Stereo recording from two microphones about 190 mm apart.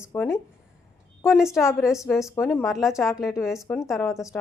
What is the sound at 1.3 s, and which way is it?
Speech, centre (ahead or behind).